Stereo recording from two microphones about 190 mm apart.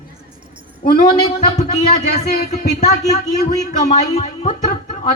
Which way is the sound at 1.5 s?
35° left (ahead or behind).